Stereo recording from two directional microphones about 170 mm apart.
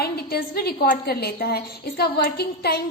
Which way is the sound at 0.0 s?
65° left (ahead or behind).